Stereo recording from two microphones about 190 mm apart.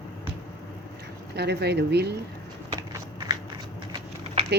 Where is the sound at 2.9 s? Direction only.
20° right (ahead or behind).